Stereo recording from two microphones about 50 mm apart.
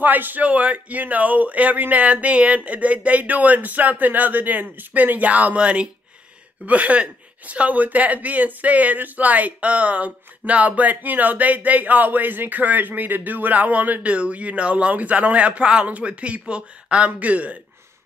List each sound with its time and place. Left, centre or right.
0.0 s speech: right